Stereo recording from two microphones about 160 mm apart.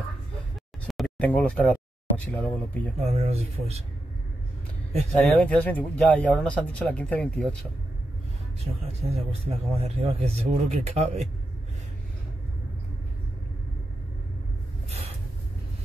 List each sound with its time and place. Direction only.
0.8 s speech: centre (ahead or behind)
3.1 s speech: 40° right (ahead or behind)
5.2 s speech: 10° left (ahead or behind)
8.8 s speech: 40° right (ahead or behind)